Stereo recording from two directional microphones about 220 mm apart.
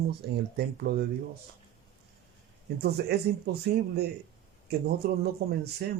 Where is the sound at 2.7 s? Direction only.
45° right (ahead or behind).